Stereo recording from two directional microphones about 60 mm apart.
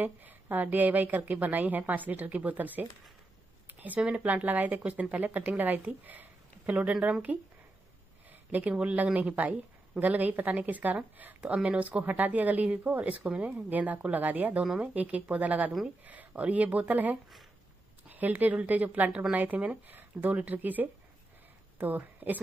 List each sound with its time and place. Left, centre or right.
0.0 s speech: right
4.0 s speech: centre
4.3 s speech: right
12.0 s speech: right
13.2 s speech: centre
13.7 s a woman's voice: right